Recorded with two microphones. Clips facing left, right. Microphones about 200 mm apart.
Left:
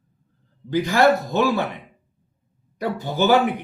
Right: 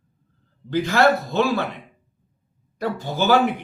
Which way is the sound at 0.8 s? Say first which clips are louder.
Left 1 dB; 15° left (ahead or behind).